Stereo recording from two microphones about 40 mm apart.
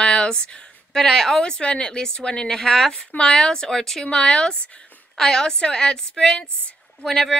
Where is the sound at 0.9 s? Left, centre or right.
Centre.